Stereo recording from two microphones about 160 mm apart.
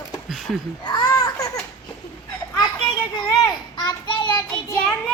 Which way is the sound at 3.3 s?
25° left (ahead or behind).